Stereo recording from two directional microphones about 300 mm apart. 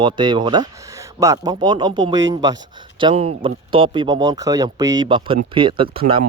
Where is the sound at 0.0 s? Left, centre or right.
Centre.